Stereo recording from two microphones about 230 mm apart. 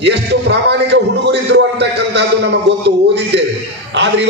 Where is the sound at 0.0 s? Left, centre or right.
Right.